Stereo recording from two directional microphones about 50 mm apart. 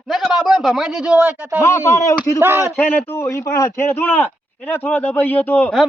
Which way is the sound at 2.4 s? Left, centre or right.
Right.